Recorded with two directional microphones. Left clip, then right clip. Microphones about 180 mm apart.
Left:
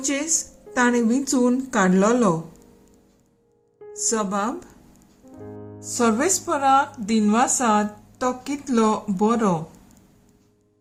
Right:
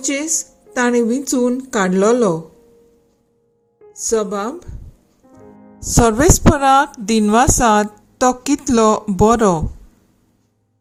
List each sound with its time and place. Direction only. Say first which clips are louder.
0.0 s a woman's voice: right 4 dB; 25° right (ahead or behind)
4.0 s a woman's voice: right 5 dB; 20° right (ahead or behind)
5.8 s speech: right 8 dB; 40° right (ahead or behind)